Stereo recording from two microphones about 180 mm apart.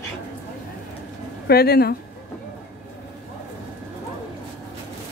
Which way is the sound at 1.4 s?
60° left (ahead or behind).